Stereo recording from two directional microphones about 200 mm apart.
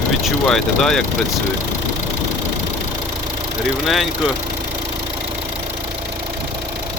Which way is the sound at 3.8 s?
Centre (ahead or behind).